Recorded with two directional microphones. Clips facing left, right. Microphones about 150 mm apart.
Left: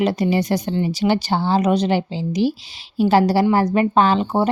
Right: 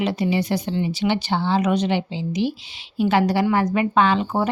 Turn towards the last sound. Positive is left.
turn(degrees=30)  # may be behind; listen again after turning